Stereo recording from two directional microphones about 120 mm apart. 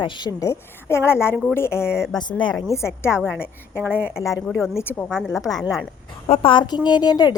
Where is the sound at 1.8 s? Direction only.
5° right (ahead or behind).